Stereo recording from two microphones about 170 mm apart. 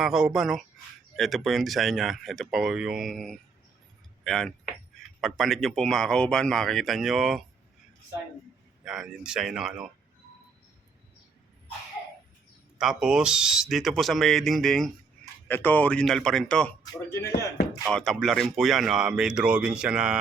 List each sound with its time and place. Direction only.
0.0 s speech: 5° right (ahead or behind)
8.8 s speech: 5° right (ahead or behind)
12.8 s speech: 5° right (ahead or behind); by 17.2 s 15° left (ahead or behind)
17.9 s speech: centre (ahead or behind)